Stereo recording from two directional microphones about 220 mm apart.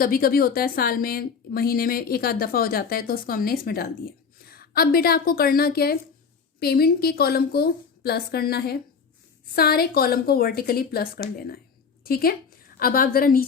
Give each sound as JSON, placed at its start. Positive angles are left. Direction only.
{"t": 0.0, "sound": "a woman's voice", "side_deg": 40}